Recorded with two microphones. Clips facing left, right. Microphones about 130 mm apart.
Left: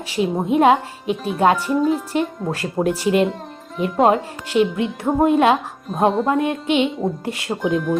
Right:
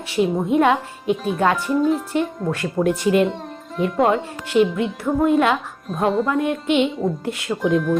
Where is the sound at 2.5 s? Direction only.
35° left (ahead or behind).